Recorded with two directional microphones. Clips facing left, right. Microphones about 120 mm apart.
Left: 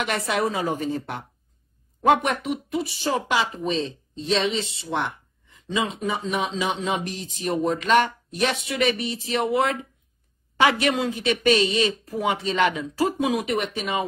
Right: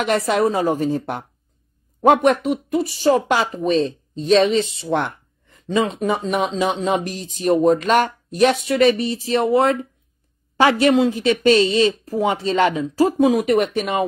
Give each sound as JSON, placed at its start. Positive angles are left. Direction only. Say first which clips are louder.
{"t": 0.0, "sound": "speech", "louder": "right 6 dB", "side_deg": -40}
{"t": 2.2, "sound": "speech", "louder": "right 9 dB", "side_deg": -40}